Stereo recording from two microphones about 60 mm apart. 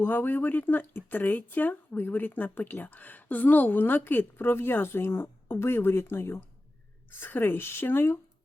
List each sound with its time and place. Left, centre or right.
0.0 s speech: left